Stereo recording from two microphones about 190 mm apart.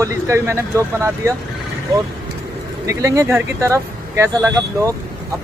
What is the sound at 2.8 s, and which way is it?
Speech, 15° right (ahead or behind).